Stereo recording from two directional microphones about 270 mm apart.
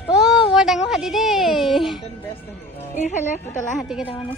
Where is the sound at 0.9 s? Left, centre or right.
Centre.